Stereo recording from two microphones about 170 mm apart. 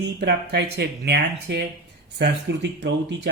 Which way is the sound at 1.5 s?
90° right.